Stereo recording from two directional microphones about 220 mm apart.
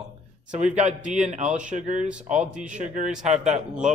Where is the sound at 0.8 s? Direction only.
5° right (ahead or behind).